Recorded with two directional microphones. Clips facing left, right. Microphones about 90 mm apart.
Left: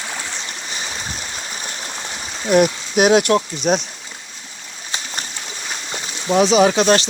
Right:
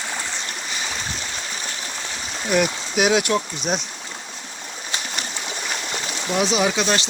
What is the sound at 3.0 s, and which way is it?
Speech, 50° left (ahead or behind).